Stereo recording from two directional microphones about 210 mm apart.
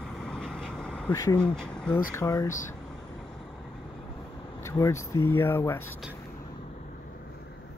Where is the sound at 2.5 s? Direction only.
35° left (ahead or behind).